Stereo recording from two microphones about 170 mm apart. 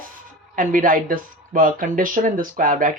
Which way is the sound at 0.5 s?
55° right (ahead or behind).